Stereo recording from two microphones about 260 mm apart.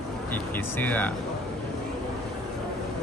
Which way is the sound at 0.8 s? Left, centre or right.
Centre.